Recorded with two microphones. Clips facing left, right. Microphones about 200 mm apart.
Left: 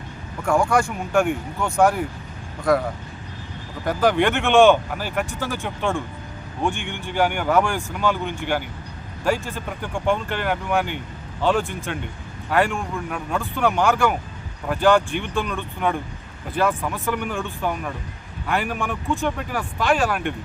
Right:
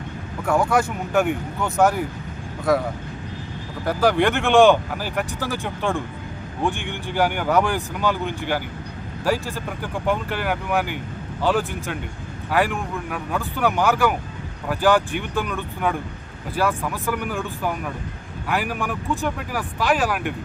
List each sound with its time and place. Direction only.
0.4 s speech: 5° right (ahead or behind)
3.8 s speech: 5° right (ahead or behind)
4.5 s speech: 15° right (ahead or behind)
6.7 s speech: 55° left (ahead or behind)
7.2 s speech: 10° right (ahead or behind)